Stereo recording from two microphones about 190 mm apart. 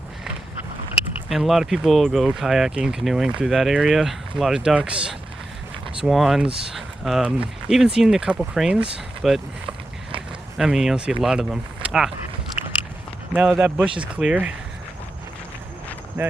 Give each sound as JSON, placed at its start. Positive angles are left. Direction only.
{"t": 1.3, "sound": "speech", "side_deg": 0}
{"t": 10.6, "sound": "speech", "side_deg": 0}
{"t": 12.6, "sound": "biting", "side_deg": 30}
{"t": 13.3, "sound": "speech", "side_deg": -5}
{"t": 16.2, "sound": "speech", "side_deg": -10}